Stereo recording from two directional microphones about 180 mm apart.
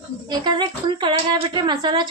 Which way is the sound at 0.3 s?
25° right (ahead or behind).